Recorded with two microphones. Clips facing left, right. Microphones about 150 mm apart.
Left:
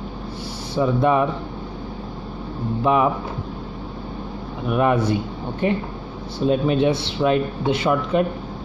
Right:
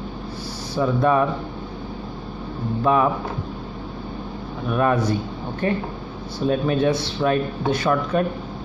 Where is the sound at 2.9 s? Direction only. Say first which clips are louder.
Even; 20° left (ahead or behind).